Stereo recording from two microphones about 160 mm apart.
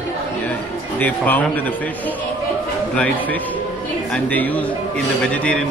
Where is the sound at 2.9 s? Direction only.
10° left (ahead or behind).